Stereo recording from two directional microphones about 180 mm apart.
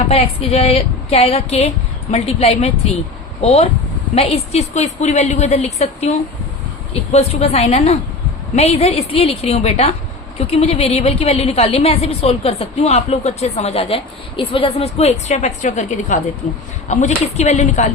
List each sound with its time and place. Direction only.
0.1 s a woman's voice: 35° left (ahead or behind)